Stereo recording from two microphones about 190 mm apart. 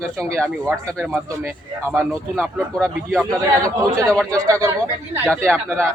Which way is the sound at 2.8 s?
5° left (ahead or behind).